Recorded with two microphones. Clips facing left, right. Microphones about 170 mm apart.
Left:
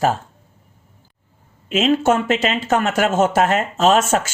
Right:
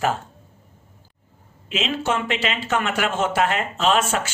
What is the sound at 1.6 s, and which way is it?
Speech, 45° left (ahead or behind).